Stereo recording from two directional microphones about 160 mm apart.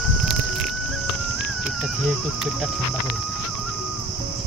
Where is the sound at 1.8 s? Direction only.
5° right (ahead or behind).